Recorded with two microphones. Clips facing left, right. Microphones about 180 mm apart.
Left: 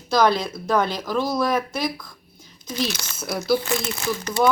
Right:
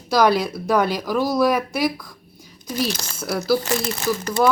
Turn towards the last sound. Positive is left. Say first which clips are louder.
# right 3 dB
turn(degrees=-45)  # may be behind; listen again after turning